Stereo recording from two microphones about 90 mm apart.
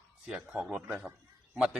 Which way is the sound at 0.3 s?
10° right (ahead or behind).